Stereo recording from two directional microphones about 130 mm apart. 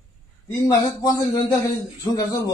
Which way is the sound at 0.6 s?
30° left (ahead or behind).